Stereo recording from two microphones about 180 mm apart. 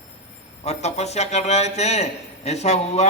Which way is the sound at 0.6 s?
35° left (ahead or behind).